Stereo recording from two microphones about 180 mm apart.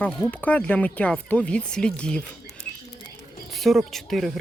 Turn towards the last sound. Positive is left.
turn(degrees=0)  # may be behind; listen again after turning